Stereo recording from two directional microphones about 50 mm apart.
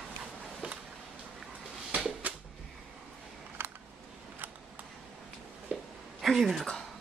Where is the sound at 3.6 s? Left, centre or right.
Right.